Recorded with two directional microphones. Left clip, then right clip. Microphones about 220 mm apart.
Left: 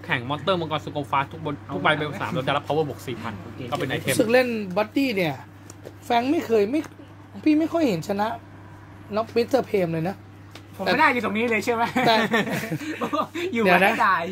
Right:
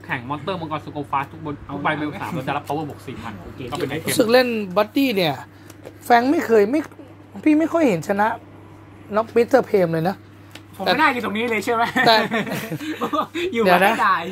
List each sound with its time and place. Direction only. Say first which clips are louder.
0.0 s speech: left 1 dB; 40° left (ahead or behind)
4.2 s speech: right 4 dB; 25° right (ahead or behind)